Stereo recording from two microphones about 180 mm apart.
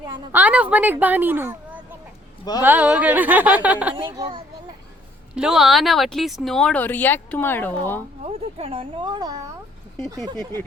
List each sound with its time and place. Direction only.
0.0 s a sound: 20° right (ahead or behind)
0.3 s a woman's voice: 10° right (ahead or behind)
2.4 s speech: 20° left (ahead or behind)
2.6 s a woman's voice: 10° right (ahead or behind)
3.9 s speech: 25° right (ahead or behind)
5.3 s speech: 5° right (ahead or behind)
8.3 s speech: 30° right (ahead or behind)